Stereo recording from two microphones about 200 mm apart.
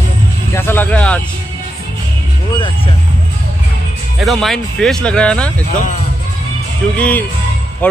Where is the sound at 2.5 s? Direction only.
25° left (ahead or behind).